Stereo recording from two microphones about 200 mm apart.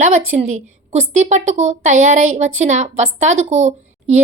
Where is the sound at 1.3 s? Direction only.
35° right (ahead or behind).